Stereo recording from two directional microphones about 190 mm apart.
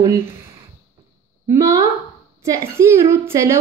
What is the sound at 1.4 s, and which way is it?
A woman's voice, 15° right (ahead or behind).